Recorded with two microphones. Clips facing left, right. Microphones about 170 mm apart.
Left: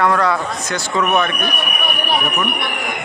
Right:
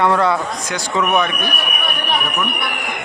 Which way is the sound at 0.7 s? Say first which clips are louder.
Even; 15° right (ahead or behind).